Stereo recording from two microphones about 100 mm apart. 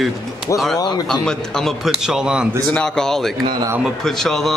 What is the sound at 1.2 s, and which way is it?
Speech, 5° left (ahead or behind).